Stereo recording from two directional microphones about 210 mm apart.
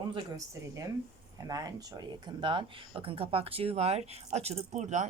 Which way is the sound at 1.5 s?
15° right (ahead or behind).